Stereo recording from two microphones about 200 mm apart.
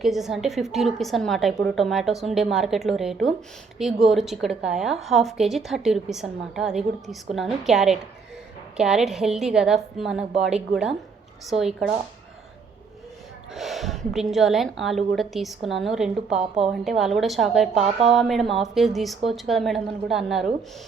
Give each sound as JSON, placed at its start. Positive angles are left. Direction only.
{"t": 0.0, "sound": "a woman's voice", "side_deg": 0}
{"t": 13.5, "sound": "a woman's voice", "side_deg": 0}